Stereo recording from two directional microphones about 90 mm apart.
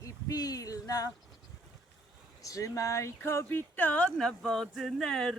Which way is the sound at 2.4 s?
40° left (ahead or behind).